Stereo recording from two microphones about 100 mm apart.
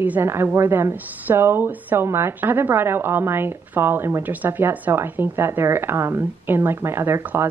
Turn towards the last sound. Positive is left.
turn(degrees=-20)  # may be behind; listen again after turning